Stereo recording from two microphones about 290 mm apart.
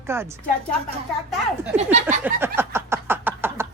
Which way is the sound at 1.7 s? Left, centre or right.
Right.